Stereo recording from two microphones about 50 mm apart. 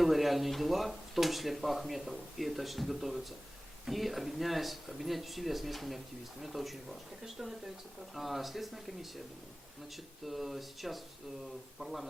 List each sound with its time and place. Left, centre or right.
0.0 s speech: centre
10.2 s speech: centre